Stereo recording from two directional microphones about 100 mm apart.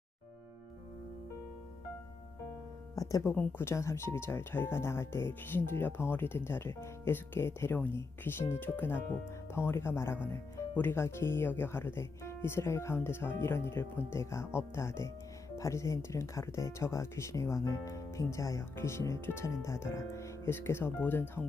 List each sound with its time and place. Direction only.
2.9 s music: 35° left (ahead or behind)
3.3 s speech: 20° left (ahead or behind)